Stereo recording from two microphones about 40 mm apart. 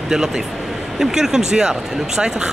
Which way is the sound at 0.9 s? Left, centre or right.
Centre.